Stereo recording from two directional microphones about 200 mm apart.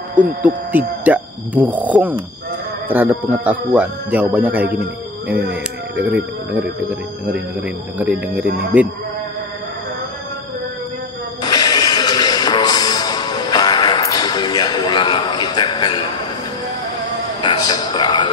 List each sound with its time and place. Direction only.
0.4 s speech: 10° right (ahead or behind)
11.4 s music: 20° left (ahead or behind)
17.4 s a sound: 20° left (ahead or behind)